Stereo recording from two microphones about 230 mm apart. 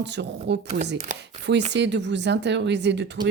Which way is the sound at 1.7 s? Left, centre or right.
Right.